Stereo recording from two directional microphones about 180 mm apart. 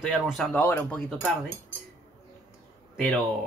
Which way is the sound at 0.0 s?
5° left (ahead or behind).